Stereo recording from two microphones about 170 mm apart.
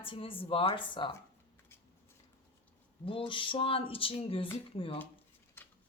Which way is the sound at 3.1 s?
30° left (ahead or behind).